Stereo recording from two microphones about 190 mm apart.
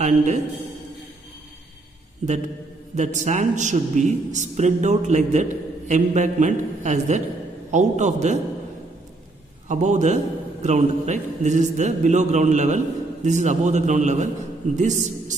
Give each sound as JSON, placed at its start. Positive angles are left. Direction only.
{"t": 0.0, "sound": "a man's voice", "side_deg": -40}
{"t": 3.0, "sound": "a man's voice", "side_deg": -40}
{"t": 9.7, "sound": "a man's voice", "side_deg": -40}